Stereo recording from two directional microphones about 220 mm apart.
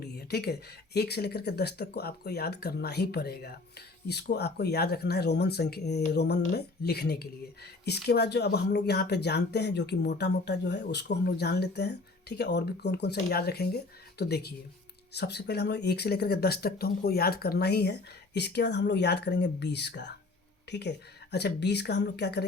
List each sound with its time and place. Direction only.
0.0 s speech: 45° left (ahead or behind)